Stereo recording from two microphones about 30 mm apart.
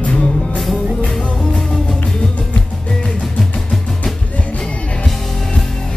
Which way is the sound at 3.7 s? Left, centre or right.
Centre.